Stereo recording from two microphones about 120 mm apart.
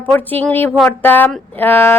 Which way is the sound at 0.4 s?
15° left (ahead or behind).